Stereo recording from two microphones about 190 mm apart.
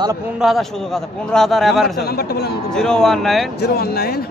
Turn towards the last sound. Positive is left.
turn(degrees=55)  # may be behind; listen again after turning